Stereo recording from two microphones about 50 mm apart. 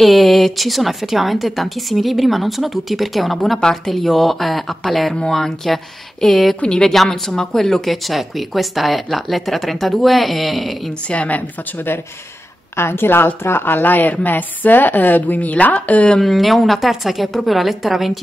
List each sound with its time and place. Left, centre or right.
0.0 s speech: centre
3.5 s speech: centre
5.1 s speech: centre
6.2 s speech: centre
6.6 s speech: centre
11.1 s a woman's voice: left
12.7 s a woman's voice: left
16.2 s speech: centre